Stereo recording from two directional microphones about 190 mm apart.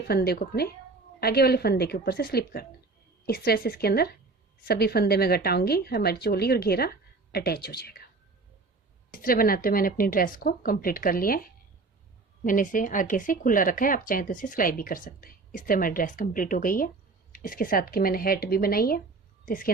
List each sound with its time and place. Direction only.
0.1 s a woman's voice: 55° left (ahead or behind)
9.1 s speech: 50° left (ahead or behind)
12.5 s speech: 45° left (ahead or behind)